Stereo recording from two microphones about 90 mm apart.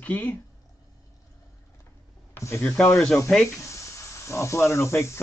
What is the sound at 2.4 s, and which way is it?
Speech, 30° left (ahead or behind).